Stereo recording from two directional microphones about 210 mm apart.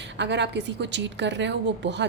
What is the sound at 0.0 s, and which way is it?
A woman's voice, 55° right (ahead or behind).